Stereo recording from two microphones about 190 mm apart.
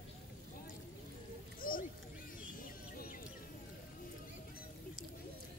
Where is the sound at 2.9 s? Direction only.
50° left (ahead or behind).